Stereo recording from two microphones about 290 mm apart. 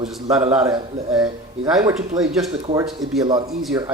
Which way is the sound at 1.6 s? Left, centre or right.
Centre.